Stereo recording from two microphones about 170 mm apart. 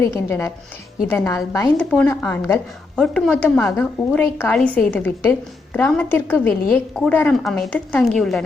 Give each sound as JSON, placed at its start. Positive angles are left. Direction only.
{"t": 0.0, "sound": "a woman's voice", "side_deg": 15}
{"t": 1.8, "sound": "a woman's voice", "side_deg": 5}
{"t": 3.0, "sound": "a woman's voice", "side_deg": 5}